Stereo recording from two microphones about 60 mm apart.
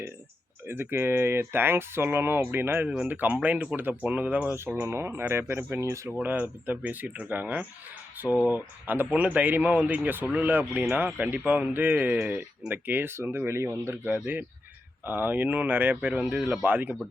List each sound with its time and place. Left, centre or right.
0.7 s speech: right
4.8 s speech: right
5.8 s speech: right
6.2 s speech: right
15.0 s speech: right